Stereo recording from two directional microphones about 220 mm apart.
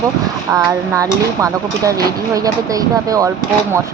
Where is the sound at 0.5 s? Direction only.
15° right (ahead or behind).